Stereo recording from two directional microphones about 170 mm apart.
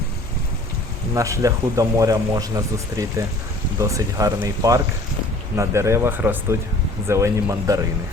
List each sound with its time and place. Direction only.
1.1 s speech: 20° right (ahead or behind)